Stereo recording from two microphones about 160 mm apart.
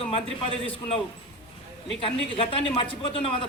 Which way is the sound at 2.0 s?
35° left (ahead or behind).